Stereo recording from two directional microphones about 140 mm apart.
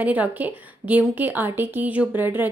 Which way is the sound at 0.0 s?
10° right (ahead or behind).